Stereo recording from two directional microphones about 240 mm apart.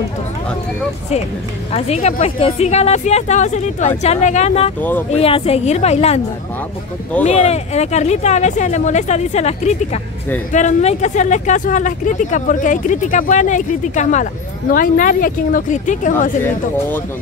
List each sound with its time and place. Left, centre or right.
1.7 s speech: left
7.2 s speech: left
16.4 s speech: centre